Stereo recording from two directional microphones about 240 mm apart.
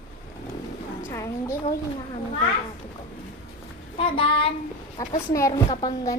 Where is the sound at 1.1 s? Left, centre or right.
Centre.